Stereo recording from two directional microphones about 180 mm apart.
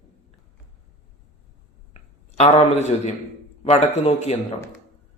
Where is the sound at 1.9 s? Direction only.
35° left (ahead or behind).